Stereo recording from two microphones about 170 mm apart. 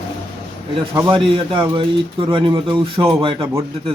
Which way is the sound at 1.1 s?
30° right (ahead or behind).